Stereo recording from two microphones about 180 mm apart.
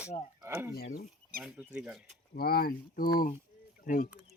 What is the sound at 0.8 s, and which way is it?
Speech, 60° left (ahead or behind).